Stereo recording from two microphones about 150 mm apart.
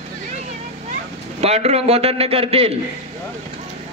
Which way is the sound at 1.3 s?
45° right (ahead or behind).